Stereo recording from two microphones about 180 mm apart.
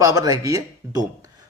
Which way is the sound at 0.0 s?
20° right (ahead or behind).